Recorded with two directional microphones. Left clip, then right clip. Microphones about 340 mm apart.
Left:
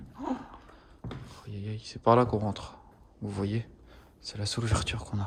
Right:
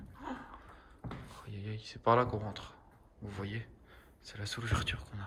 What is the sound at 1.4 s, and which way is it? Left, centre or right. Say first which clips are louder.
Speech: left 4 dB; centre.